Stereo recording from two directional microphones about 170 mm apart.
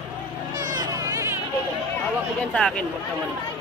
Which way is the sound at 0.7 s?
15° right (ahead or behind).